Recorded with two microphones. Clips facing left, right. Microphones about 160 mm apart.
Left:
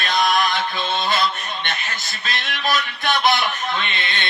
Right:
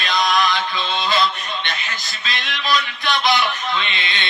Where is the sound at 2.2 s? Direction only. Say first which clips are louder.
Right 1 dB; 50° left (ahead or behind).